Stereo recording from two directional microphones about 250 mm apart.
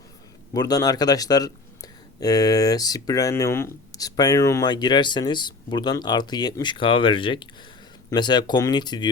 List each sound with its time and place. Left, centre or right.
0.5 s speech: centre